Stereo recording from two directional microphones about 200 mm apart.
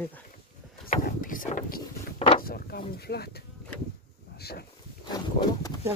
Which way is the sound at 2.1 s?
25° left (ahead or behind).